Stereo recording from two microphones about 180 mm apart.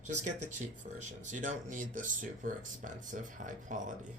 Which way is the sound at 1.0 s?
45° right (ahead or behind).